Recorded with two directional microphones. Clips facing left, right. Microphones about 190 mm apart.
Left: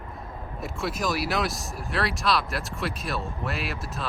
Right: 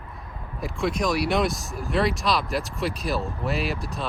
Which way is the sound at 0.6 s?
Centre (ahead or behind).